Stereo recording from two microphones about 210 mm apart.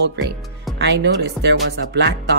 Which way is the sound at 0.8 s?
55° right (ahead or behind).